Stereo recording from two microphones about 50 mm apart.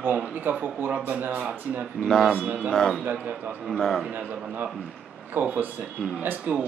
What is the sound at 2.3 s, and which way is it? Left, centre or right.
Speech, right.